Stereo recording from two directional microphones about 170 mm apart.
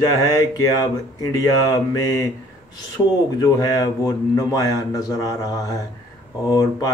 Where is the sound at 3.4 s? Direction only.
20° left (ahead or behind).